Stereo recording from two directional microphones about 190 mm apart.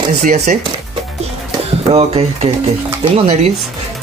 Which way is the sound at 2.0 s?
30° right (ahead or behind).